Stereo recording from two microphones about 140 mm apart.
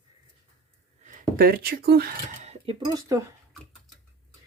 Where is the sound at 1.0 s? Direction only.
90° right.